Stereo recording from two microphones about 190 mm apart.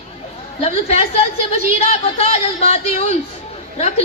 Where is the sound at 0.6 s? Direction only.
35° left (ahead or behind).